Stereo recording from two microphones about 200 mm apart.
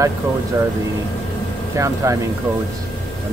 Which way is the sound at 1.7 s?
15° right (ahead or behind).